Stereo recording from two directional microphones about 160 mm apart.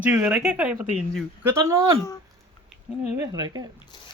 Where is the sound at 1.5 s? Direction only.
20° right (ahead or behind).